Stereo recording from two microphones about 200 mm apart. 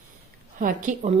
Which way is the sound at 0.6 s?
40° right (ahead or behind).